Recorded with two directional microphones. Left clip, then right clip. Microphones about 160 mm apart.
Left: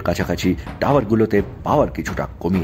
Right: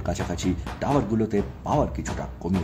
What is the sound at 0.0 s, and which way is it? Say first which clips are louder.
Speech: left 8 dB; 25° left (ahead or behind).